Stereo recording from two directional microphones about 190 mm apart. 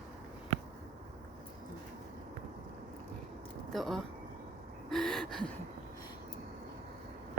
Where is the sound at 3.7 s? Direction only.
Centre (ahead or behind).